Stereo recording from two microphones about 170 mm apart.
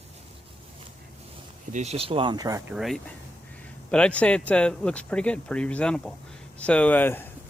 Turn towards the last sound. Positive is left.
turn(degrees=10)  # may be behind; listen again after turning